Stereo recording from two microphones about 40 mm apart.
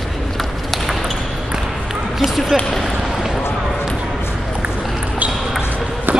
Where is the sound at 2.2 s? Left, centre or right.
Centre.